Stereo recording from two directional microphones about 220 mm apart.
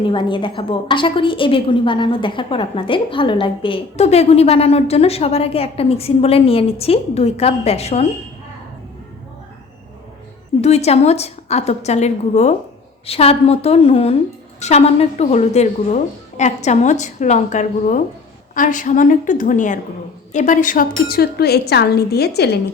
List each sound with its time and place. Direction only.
0.0 s a woman's voice: 20° left (ahead or behind)
10.6 s a woman's voice: 30° left (ahead or behind); by 22.4 s 45° left (ahead or behind)